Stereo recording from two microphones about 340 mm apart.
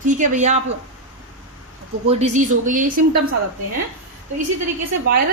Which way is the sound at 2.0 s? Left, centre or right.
Centre.